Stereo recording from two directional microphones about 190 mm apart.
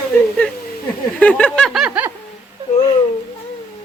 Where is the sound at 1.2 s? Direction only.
5° left (ahead or behind).